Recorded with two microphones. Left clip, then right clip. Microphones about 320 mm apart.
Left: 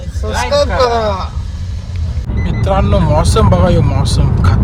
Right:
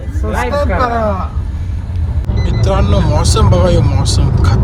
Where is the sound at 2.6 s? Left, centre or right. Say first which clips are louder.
Left 2 dB; centre.